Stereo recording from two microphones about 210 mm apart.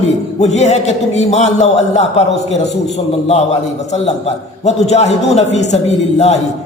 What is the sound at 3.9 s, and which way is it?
A man's voice, 30° left (ahead or behind).